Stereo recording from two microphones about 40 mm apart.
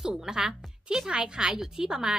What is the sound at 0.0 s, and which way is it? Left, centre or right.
A woman's voice, centre.